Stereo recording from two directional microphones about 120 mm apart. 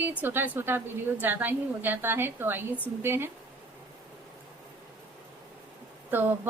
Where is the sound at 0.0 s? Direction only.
15° right (ahead or behind).